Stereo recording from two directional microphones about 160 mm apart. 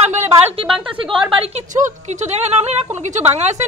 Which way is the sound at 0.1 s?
45° right (ahead or behind).